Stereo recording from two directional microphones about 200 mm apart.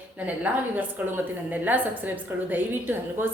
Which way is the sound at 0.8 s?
10° right (ahead or behind).